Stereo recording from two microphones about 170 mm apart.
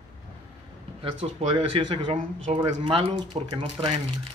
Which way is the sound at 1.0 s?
30° right (ahead or behind).